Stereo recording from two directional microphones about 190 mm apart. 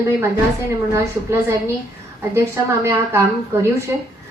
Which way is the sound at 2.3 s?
15° right (ahead or behind).